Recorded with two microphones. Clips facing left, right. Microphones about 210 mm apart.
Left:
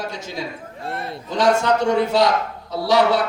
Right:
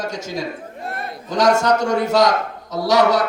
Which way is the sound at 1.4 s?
40° right (ahead or behind).